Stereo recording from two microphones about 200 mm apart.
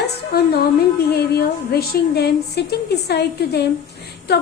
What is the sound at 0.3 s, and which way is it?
A woman's voice, 50° left (ahead or behind).